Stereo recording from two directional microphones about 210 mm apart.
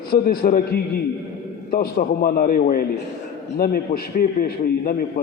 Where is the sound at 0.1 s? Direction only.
45° left (ahead or behind).